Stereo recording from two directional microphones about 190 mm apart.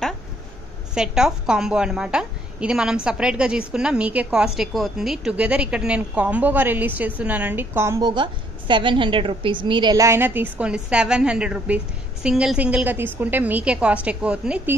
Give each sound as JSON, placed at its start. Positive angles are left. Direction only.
{"t": 0.9, "sound": "a woman's voice", "side_deg": -5}